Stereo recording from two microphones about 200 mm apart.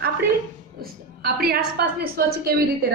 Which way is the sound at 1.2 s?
50° right (ahead or behind).